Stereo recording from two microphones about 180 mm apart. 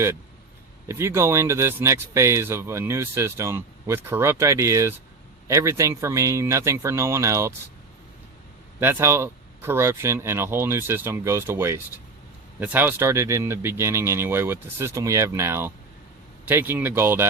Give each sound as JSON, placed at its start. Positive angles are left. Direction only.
{"t": 0.9, "sound": "speech", "side_deg": -15}
{"t": 8.8, "sound": "speech", "side_deg": -15}